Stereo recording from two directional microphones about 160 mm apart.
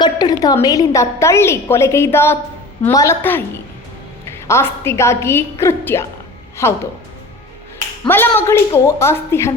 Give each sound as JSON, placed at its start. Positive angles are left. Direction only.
{"t": 0.0, "sound": "a woman's voice", "side_deg": 25}
{"t": 8.0, "sound": "a woman's voice", "side_deg": 15}